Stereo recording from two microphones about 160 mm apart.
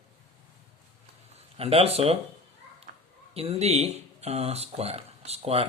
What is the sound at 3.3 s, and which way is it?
Speech, 40° right (ahead or behind).